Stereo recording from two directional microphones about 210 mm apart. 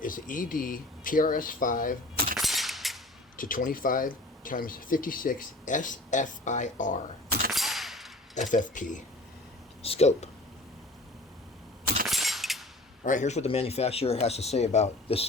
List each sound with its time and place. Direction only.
0.0 s speech: 40° left (ahead or behind)
2.4 s cap gun: centre (ahead or behind)
3.3 s speech: 40° left (ahead or behind)
7.5 s a sound: centre (ahead or behind)
8.4 s speech: 35° left (ahead or behind)
12.0 s a sound: centre (ahead or behind)
13.1 s speech: 35° left (ahead or behind)